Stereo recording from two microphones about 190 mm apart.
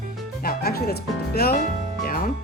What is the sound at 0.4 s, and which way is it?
Music, 55° left (ahead or behind).